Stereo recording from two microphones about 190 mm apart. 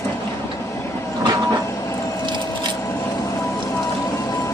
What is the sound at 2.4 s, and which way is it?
Vehicle, 10° left (ahead or behind).